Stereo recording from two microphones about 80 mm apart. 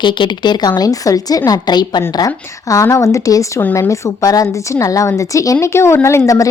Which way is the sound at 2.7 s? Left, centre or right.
Left.